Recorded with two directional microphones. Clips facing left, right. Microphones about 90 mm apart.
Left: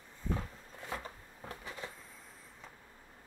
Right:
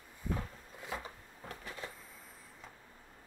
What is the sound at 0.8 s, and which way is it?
Zipper, 5° right (ahead or behind).